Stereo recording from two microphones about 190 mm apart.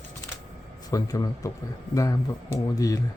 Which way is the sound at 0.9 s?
20° left (ahead or behind).